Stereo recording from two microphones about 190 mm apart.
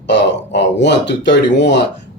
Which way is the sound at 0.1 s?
65° left (ahead or behind).